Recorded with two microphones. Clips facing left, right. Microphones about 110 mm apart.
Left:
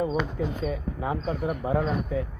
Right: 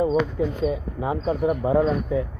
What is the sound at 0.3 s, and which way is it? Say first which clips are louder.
Speech: right 5 dB; 20° right (ahead or behind).